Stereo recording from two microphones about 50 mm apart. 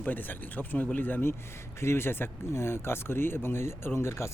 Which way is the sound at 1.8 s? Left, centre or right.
Left.